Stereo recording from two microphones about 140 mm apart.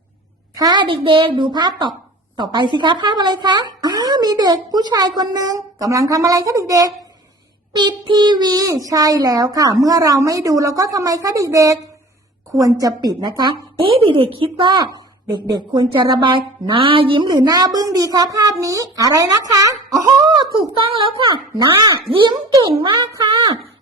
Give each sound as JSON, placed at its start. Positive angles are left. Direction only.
{"t": 0.5, "sound": "speech", "side_deg": -30}
{"t": 21.2, "sound": "speech", "side_deg": -30}